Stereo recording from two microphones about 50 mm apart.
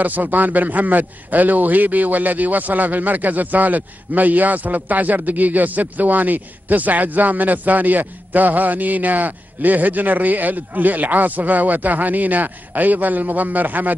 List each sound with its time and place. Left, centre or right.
0.0 s a man's voice: right